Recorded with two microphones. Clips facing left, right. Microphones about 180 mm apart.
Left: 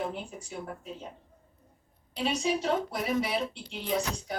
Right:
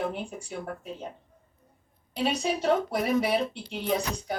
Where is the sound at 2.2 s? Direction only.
55° right (ahead or behind).